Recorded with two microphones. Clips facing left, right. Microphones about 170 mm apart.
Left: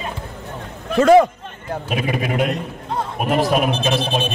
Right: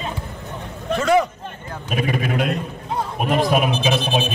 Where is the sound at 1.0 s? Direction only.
50° left (ahead or behind).